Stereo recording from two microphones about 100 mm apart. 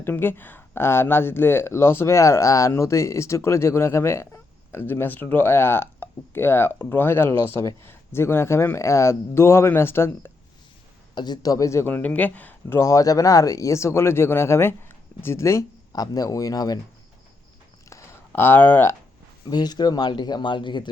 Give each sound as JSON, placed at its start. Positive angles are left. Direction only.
{"t": 0.0, "sound": "speech", "side_deg": 20}
{"t": 11.1, "sound": "speech", "side_deg": 45}
{"t": 12.6, "sound": "speech", "side_deg": 30}
{"t": 18.3, "sound": "speech", "side_deg": 20}
{"t": 19.5, "sound": "speech", "side_deg": 45}